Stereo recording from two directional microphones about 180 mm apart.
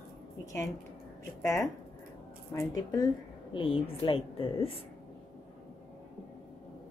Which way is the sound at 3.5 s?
30° left (ahead or behind).